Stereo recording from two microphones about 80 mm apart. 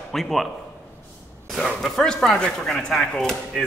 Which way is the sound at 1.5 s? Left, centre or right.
Centre.